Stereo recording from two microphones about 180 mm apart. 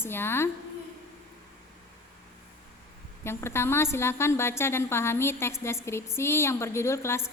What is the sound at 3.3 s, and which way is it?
A woman's voice, 15° left (ahead or behind).